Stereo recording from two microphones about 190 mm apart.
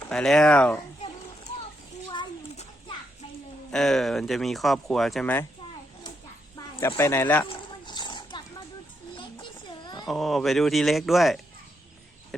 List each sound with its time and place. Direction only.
0.1 s speech: 5° left (ahead or behind)
3.7 s speech: centre (ahead or behind)
6.7 s speech: 15° left (ahead or behind)
7.4 s a sound: 25° left (ahead or behind)
10.1 s speech: centre (ahead or behind)
12.3 s a sound: 5° left (ahead or behind)